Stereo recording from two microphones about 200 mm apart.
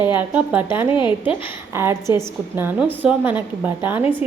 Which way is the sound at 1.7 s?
10° right (ahead or behind).